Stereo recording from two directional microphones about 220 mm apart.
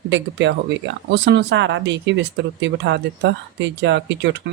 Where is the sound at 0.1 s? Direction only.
55° right (ahead or behind).